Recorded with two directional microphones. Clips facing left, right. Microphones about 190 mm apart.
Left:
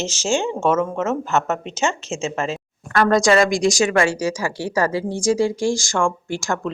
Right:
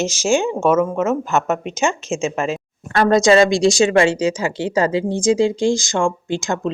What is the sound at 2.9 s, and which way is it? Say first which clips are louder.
A woman's voice: right 3 dB; 25° right (ahead or behind).